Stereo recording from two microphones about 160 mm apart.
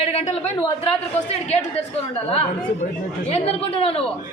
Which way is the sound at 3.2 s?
40° left (ahead or behind).